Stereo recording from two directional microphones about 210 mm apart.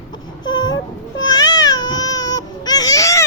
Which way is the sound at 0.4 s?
20° left (ahead or behind).